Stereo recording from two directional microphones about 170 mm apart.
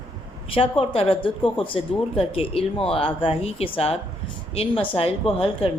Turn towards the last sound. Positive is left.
turn(degrees=35)  # may be behind; listen again after turning